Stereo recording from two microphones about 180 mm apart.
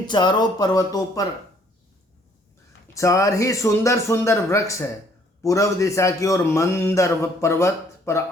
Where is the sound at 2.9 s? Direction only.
15° left (ahead or behind).